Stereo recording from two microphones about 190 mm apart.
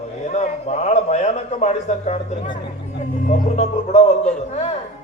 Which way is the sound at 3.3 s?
35° left (ahead or behind).